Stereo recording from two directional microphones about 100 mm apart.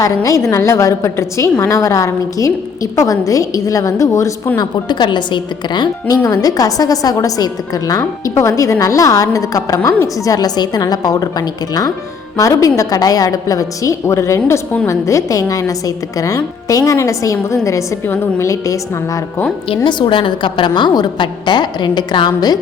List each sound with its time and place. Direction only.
0.0 s a woman's voice: 35° left (ahead or behind)
4.5 s a woman's voice: 45° left (ahead or behind)
6.2 s a woman's voice: 35° left (ahead or behind)
18.0 s a woman's voice: 20° left (ahead or behind)
18.4 s a woman's voice: 30° left (ahead or behind)
19.6 s a woman's voice: 60° left (ahead or behind); by 22.5 s 40° left (ahead or behind)